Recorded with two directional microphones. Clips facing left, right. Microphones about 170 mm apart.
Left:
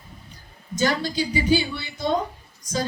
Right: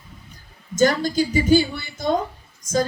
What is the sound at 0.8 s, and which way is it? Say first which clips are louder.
A woman's voice: right 5 dB; 45° right (ahead or behind).